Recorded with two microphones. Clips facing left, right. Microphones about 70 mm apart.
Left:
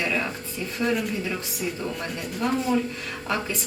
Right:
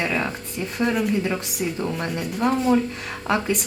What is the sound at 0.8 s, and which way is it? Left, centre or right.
Speech, right.